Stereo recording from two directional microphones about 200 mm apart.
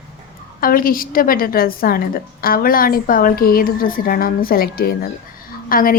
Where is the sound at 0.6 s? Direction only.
45° left (ahead or behind).